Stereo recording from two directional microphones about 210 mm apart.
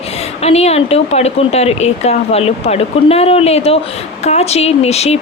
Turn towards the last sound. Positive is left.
turn(degrees=30)  # may be behind; listen again after turning